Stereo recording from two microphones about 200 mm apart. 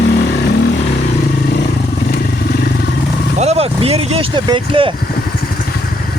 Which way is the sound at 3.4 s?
30° right (ahead or behind).